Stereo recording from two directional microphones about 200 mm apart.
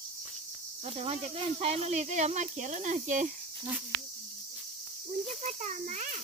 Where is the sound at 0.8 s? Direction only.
30° right (ahead or behind).